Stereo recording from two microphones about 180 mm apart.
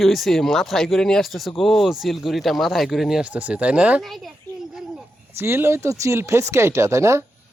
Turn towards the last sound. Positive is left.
turn(degrees=-15)  # may be behind; listen again after turning